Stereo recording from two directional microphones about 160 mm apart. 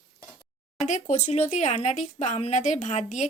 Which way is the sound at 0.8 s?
45° left (ahead or behind).